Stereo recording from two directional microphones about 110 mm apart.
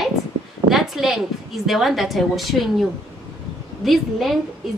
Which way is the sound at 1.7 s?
Centre (ahead or behind).